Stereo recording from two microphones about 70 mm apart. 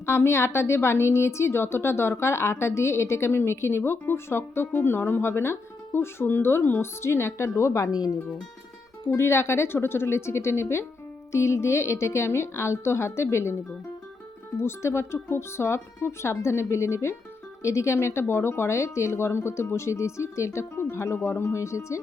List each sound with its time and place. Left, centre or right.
0.0 s a woman's voice: left
9.0 s a woman's voice: left